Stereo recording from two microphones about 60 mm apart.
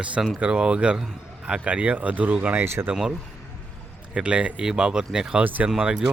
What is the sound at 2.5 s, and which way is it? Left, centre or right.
Speech, right.